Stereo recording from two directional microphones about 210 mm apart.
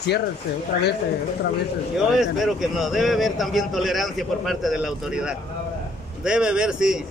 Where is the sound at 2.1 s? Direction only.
Centre (ahead or behind).